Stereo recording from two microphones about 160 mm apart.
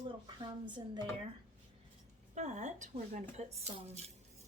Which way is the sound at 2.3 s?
50° right (ahead or behind).